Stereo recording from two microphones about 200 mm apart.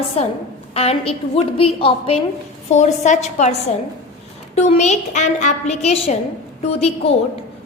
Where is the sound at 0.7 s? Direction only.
30° left (ahead or behind).